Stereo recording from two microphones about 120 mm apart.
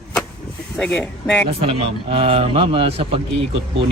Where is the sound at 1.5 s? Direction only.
55° right (ahead or behind).